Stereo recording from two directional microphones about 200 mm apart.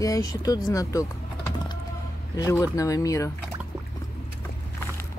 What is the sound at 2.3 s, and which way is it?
Speech, 15° left (ahead or behind).